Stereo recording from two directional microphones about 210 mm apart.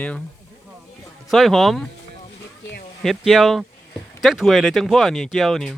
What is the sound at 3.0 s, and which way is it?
Speech, centre (ahead or behind).